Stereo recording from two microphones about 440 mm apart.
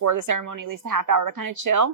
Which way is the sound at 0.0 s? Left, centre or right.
Right.